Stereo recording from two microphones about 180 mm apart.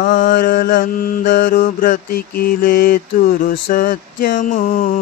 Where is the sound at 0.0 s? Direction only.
50° left (ahead or behind).